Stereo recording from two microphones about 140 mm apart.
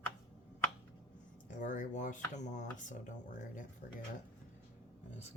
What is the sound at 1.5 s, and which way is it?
Speech, 65° left (ahead or behind).